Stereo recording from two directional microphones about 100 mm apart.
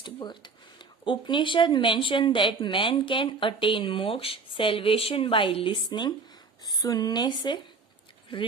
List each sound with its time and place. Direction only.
0.0 s speech: 50° left (ahead or behind)